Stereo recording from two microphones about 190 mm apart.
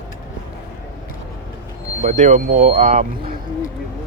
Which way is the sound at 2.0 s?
40° right (ahead or behind).